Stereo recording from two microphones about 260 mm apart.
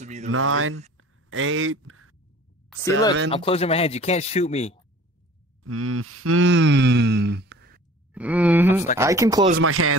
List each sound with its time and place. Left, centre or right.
0.0 s speech: right
0.3 s speech: right
0.9 s whispering: right
3.3 s speech: left
5.6 s speech: right
8.1 s wail: centre
8.9 s speech: centre
9.6 s speech: right